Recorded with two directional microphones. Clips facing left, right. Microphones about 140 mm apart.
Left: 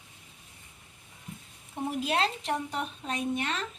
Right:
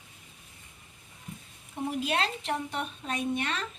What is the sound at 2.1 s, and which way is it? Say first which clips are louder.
A woman's voice: left 4 dB; 35° left (ahead or behind).